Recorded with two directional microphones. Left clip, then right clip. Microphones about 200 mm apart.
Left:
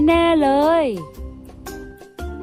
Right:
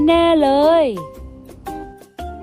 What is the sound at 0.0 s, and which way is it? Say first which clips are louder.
Music: right 2 dB; centre (ahead or behind).